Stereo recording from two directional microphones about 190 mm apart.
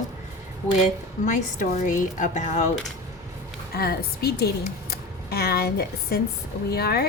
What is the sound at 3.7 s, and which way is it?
Speech, 55° left (ahead or behind).